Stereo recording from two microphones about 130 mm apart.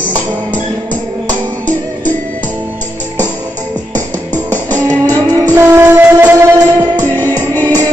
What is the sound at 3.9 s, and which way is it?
Music, 15° left (ahead or behind).